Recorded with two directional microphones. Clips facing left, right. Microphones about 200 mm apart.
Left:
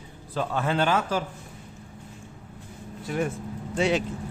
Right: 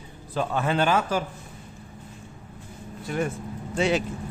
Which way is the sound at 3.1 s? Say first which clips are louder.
Even; centre (ahead or behind).